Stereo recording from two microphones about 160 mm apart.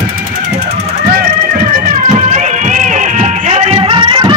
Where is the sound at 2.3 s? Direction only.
50° right (ahead or behind); by 4.3 s 30° right (ahead or behind).